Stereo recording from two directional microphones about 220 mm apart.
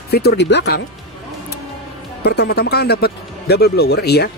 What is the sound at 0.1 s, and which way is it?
Speech, 50° left (ahead or behind).